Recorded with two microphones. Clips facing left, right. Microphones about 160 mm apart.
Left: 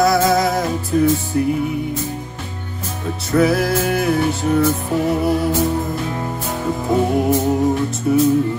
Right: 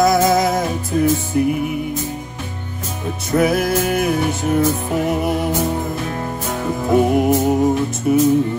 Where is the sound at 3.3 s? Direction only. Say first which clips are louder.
Left 1 dB; 20° right (ahead or behind).